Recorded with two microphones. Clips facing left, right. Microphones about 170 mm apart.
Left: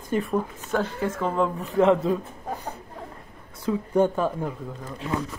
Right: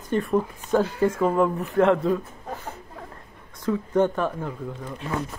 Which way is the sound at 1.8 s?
Centre (ahead or behind).